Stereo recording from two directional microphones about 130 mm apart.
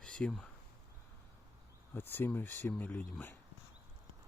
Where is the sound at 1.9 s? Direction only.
15° left (ahead or behind).